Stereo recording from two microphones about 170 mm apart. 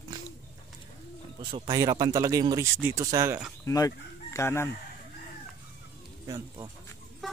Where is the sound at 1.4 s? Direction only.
25° right (ahead or behind).